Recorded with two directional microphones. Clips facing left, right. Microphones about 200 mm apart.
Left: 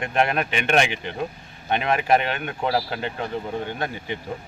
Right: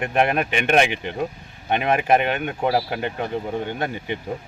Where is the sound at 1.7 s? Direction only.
15° right (ahead or behind).